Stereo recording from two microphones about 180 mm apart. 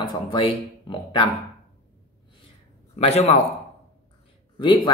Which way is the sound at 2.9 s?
35° left (ahead or behind).